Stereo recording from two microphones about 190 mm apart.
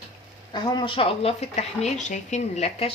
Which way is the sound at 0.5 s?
25° left (ahead or behind).